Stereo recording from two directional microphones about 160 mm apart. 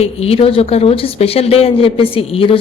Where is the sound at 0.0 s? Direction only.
40° left (ahead or behind).